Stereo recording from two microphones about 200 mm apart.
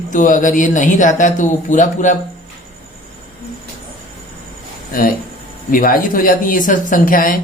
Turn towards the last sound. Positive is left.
turn(degrees=45)  # may be behind; listen again after turning